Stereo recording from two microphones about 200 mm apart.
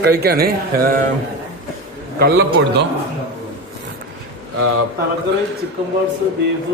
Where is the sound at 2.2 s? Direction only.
55° right (ahead or behind).